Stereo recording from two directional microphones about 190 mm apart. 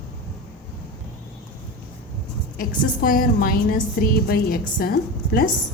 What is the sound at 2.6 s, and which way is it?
A woman's voice, 50° left (ahead or behind).